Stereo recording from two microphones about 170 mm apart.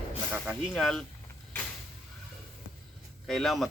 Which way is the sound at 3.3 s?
Centre (ahead or behind).